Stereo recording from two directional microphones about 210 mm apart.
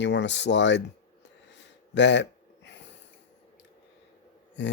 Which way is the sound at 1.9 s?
55° left (ahead or behind).